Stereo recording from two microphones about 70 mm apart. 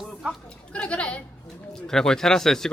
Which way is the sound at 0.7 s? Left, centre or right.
Centre.